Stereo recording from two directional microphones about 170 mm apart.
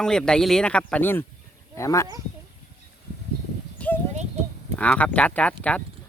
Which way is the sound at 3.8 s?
10° left (ahead or behind).